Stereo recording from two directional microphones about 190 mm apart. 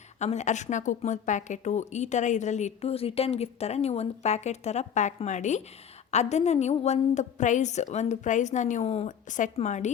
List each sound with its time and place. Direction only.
0.2 s a woman's voice: 40° left (ahead or behind)